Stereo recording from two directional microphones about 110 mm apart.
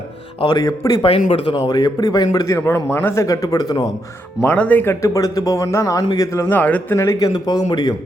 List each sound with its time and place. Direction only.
0.4 s a man's voice: 35° left (ahead or behind)
1.0 s speech: 55° left (ahead or behind)
1.5 s a man's voice: 35° left (ahead or behind)
2.6 s speech: 20° left (ahead or behind)
4.5 s speech: 15° left (ahead or behind)
5.0 s speech: 30° left (ahead or behind)
6.9 s a man's voice: 30° left (ahead or behind)